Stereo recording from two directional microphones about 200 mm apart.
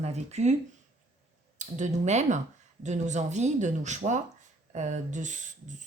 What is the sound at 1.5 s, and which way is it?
Speech, 35° right (ahead or behind).